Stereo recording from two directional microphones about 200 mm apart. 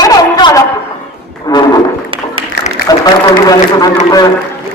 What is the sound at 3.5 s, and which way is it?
Run, 20° left (ahead or behind).